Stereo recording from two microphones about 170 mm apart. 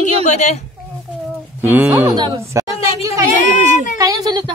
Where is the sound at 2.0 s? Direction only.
25° right (ahead or behind).